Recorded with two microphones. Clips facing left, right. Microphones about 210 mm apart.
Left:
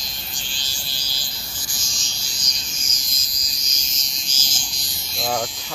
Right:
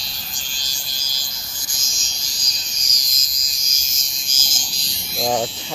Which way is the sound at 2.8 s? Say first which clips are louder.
Left 2 dB; 40° right (ahead or behind).